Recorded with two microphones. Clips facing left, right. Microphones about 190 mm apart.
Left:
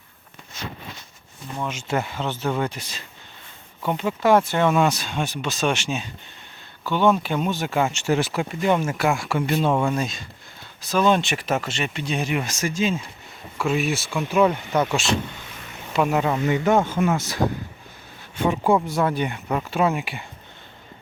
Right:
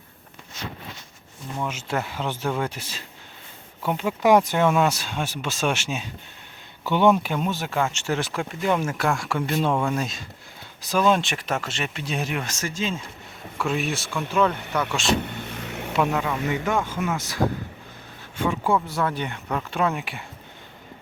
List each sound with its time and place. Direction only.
1.5 s speech: 5° right (ahead or behind)
7.8 s speech: 10° left (ahead or behind)
16.2 s speech: 35° left (ahead or behind)
18.3 s speech: 20° left (ahead or behind); by 20.2 s 5° left (ahead or behind)